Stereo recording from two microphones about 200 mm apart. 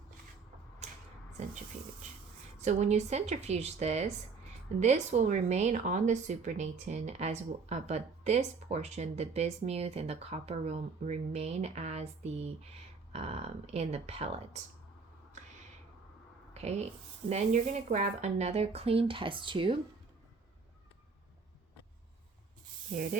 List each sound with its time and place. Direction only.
2.6 s speech: 35° right (ahead or behind)
16.6 s speech: 30° right (ahead or behind)